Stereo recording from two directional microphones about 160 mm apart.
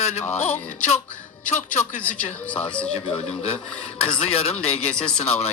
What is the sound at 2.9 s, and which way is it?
A man's voice, 35° left (ahead or behind).